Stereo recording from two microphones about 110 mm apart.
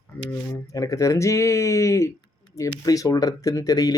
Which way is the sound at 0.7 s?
30° left (ahead or behind).